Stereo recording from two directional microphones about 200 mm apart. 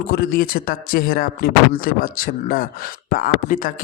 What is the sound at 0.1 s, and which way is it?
Speech, 50° left (ahead or behind).